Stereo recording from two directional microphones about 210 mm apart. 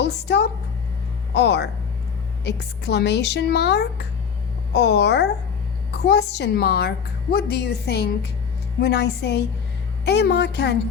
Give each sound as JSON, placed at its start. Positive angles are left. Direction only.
{"t": 0.0, "sound": "a woman's voice", "side_deg": 55}